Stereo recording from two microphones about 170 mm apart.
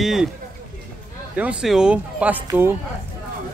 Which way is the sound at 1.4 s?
5° right (ahead or behind).